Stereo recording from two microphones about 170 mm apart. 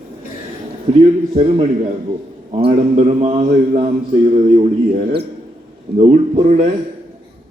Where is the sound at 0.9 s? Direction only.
35° right (ahead or behind).